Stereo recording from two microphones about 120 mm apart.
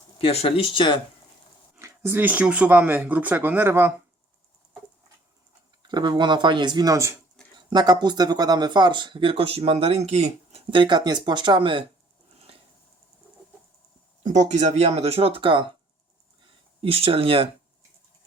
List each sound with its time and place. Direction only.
0.2 s speech: 50° left (ahead or behind)
1.8 s speech: 20° right (ahead or behind)
5.9 s speech: 40° right (ahead or behind)
7.7 s speech: 35° right (ahead or behind)
14.2 s speech: 80° right; by 17.5 s 50° right (ahead or behind)